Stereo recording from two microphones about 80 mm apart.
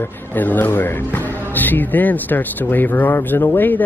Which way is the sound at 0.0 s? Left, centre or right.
Left.